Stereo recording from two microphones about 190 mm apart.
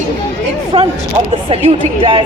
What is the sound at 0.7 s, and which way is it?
A woman's voice, 30° right (ahead or behind).